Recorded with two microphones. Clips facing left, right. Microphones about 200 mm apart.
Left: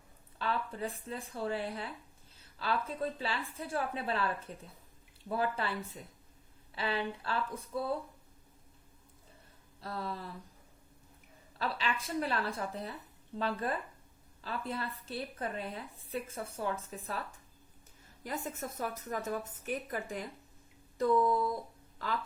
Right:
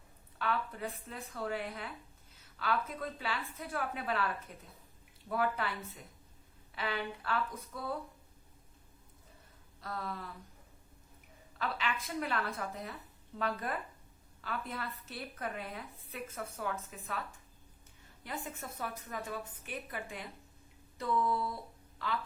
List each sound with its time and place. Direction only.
0.3 s a woman's voice: 30° left (ahead or behind)
6.7 s a woman's voice: 30° left (ahead or behind)
9.8 s a woman's voice: 30° left (ahead or behind)
11.6 s a woman's voice: 30° left (ahead or behind)